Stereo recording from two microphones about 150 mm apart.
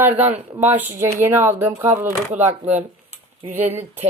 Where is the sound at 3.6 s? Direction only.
50° right (ahead or behind).